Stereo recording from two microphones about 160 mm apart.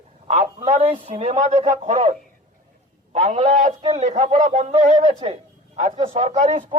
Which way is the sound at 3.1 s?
40° right (ahead or behind).